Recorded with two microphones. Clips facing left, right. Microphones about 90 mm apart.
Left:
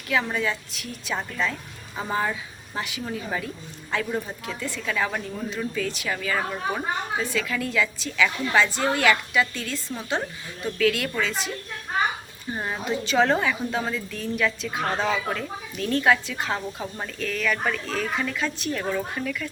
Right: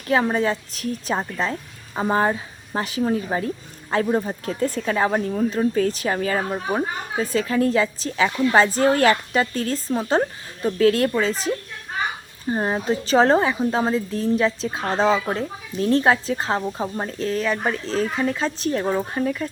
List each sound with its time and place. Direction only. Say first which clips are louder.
0.1 s speech: right 5 dB; 40° right (ahead or behind)